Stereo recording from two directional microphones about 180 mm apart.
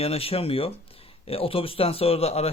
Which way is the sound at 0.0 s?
35° left (ahead or behind).